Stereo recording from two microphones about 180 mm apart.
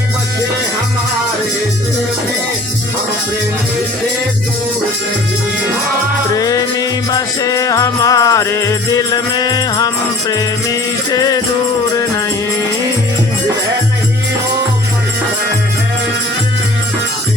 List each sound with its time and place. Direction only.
6.3 s music: 20° left (ahead or behind)